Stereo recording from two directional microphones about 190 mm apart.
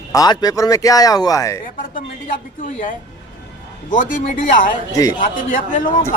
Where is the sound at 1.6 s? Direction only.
45° left (ahead or behind).